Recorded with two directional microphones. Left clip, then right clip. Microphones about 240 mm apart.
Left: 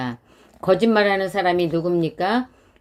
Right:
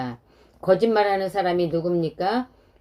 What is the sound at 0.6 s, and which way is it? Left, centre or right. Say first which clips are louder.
Speech: left 2 dB; left.